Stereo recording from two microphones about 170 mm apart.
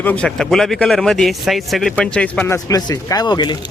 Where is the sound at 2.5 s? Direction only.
20° left (ahead or behind).